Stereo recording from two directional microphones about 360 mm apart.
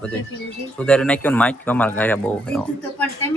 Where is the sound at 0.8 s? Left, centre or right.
Centre.